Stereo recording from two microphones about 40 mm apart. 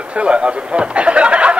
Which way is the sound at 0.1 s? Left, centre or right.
Right.